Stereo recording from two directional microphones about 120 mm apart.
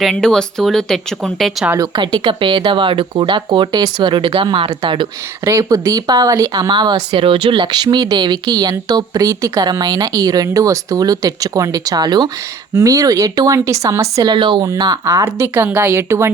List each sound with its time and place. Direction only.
0.0 s speech: 5° left (ahead or behind)
1.8 s speech: 40° right (ahead or behind)
5.5 s speech: 25° right (ahead or behind)
14.3 s speech: 45° right (ahead or behind)
14.6 s speech: 30° right (ahead or behind)